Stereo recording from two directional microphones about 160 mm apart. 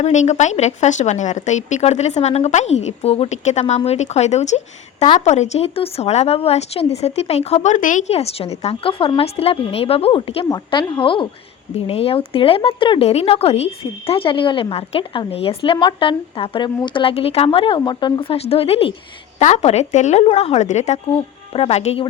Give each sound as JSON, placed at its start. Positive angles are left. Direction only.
{"t": 0.0, "sound": "speech", "side_deg": 45}